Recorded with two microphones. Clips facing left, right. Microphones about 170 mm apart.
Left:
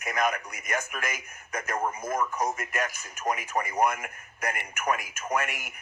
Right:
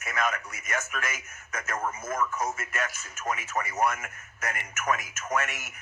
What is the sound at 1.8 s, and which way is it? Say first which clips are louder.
Speech: left 1 dB; 35° left (ahead or behind).